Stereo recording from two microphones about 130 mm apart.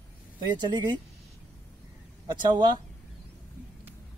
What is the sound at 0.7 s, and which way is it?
Speech, 35° right (ahead or behind).